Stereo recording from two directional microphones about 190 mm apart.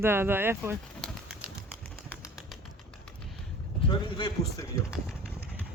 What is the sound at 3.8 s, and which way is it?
A man's voice, 25° left (ahead or behind).